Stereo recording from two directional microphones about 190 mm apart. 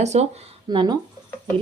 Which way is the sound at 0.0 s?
35° right (ahead or behind).